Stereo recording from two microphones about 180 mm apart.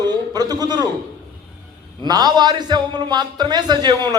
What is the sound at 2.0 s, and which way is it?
A man's voice, 20° right (ahead or behind).